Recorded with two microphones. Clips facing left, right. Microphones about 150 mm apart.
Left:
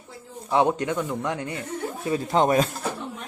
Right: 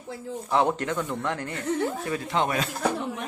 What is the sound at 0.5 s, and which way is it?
Speech, 15° left (ahead or behind).